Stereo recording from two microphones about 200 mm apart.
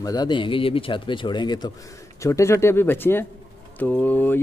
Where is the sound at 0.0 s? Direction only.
20° left (ahead or behind).